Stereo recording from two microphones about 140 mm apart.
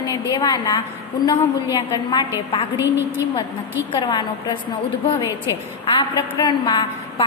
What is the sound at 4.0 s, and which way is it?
Speech, 30° left (ahead or behind).